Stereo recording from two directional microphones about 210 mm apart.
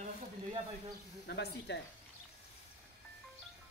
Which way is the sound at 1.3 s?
55° left (ahead or behind).